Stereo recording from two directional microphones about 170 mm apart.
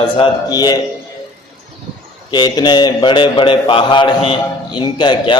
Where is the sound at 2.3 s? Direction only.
25° left (ahead or behind).